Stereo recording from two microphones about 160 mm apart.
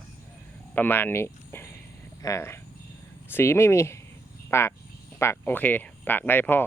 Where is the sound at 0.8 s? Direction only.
10° left (ahead or behind).